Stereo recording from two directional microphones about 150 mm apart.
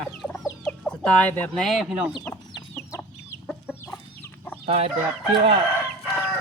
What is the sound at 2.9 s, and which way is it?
Chicken, 20° left (ahead or behind).